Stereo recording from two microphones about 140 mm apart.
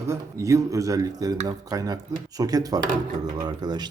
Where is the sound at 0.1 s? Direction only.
20° right (ahead or behind).